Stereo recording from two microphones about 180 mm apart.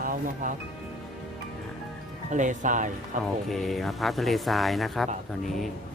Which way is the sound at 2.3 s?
45° right (ahead or behind).